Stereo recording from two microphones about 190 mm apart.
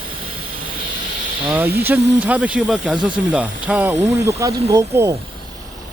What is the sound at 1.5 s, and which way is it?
Speech, 10° right (ahead or behind).